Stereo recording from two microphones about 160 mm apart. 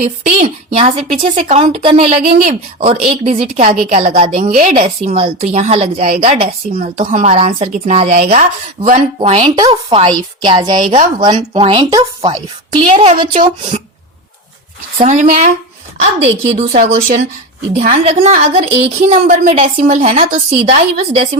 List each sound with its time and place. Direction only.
0.0 s speech: 55° right (ahead or behind)
9.6 s speech: 30° right (ahead or behind)
15.0 s speech: 50° right (ahead or behind)
16.6 s speech: 60° right (ahead or behind)
17.8 s speech: 50° right (ahead or behind)